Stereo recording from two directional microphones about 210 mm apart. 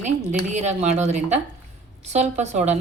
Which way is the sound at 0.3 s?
35° right (ahead or behind).